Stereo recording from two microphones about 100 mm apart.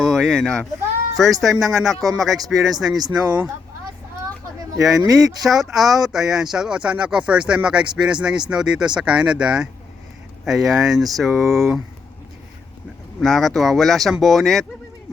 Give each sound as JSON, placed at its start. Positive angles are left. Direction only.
{"t": 0.0, "sound": "speech", "side_deg": 0}
{"t": 5.4, "sound": "speech", "side_deg": -5}
{"t": 13.1, "sound": "speech", "side_deg": 5}